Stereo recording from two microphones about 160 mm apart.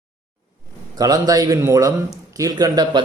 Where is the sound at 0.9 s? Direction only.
25° right (ahead or behind).